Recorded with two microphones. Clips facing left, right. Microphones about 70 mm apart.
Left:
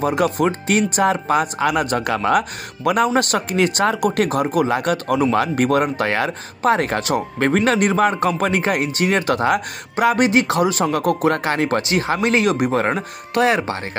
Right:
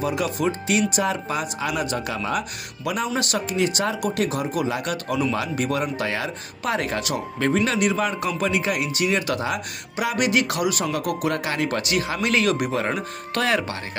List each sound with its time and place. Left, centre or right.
0.0 s speech: left
6.6 s speech: left
12.7 s speech: left
13.4 s speech: left